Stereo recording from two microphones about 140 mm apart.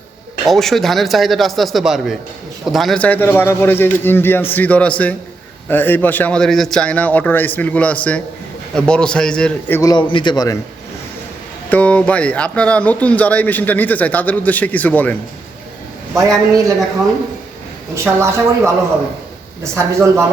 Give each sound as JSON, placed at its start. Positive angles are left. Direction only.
{"t": 0.4, "sound": "a man's voice", "side_deg": 0}
{"t": 9.8, "sound": "a man's voice", "side_deg": 35}
{"t": 11.7, "sound": "speech", "side_deg": 10}
{"t": 16.1, "sound": "speech", "side_deg": -25}
{"t": 17.9, "sound": "speech", "side_deg": -20}